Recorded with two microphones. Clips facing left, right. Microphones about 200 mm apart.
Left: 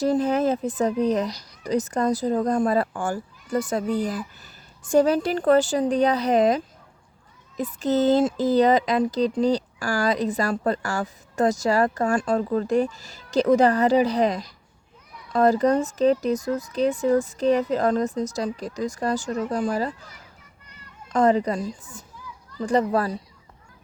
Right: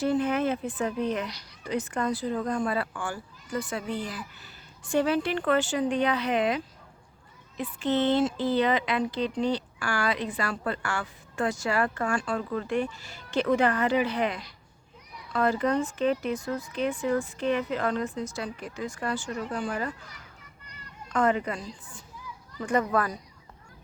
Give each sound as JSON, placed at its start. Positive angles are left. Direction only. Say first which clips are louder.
{"t": 0.0, "sound": "speech", "louder": "left 4 dB", "side_deg": 40}
{"t": 21.1, "sound": "speech", "louder": "left 6 dB", "side_deg": 35}
{"t": 22.5, "sound": "speech", "louder": "left 4 dB", "side_deg": 30}